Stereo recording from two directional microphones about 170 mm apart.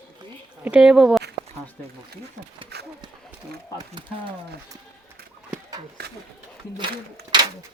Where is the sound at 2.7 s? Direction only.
75° right (ahead or behind).